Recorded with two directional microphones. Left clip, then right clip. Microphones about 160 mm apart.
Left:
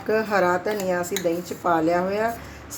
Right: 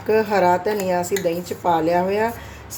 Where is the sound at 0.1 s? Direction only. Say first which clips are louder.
Right 4 dB; 15° right (ahead or behind).